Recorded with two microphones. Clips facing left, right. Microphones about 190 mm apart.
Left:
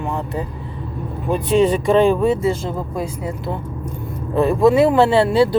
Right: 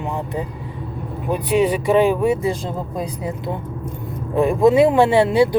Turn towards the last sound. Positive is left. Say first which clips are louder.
# even
turn(degrees=-20)  # may be behind; listen again after turning